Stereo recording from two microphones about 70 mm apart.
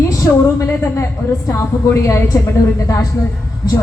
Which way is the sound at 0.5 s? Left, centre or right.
Left.